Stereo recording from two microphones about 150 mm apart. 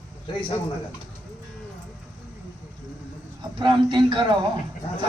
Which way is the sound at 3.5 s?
30° right (ahead or behind).